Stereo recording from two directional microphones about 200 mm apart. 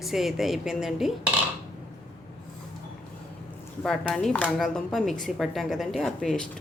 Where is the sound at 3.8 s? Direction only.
5° left (ahead or behind).